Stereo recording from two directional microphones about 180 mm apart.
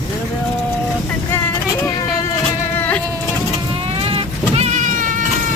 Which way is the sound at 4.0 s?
35° right (ahead or behind).